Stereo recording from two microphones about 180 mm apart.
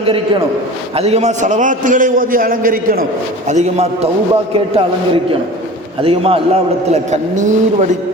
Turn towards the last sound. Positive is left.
turn(degrees=-40)  # may be behind; listen again after turning